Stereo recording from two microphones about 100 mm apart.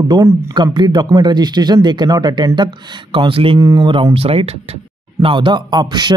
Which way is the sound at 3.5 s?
35° right (ahead or behind).